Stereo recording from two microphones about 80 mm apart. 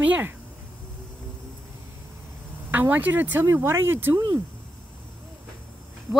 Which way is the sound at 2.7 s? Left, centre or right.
Right.